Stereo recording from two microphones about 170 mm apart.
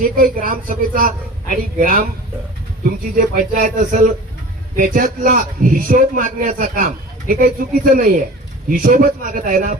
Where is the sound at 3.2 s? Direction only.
55° right (ahead or behind).